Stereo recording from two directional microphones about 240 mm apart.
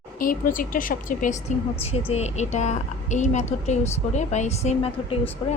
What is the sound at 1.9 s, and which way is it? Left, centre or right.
A woman's voice, left.